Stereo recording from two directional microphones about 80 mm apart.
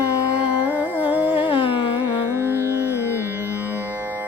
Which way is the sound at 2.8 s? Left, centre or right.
Left.